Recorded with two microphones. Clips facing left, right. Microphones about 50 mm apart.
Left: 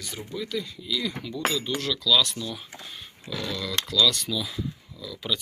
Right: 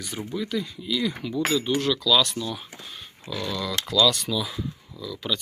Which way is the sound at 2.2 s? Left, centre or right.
Centre.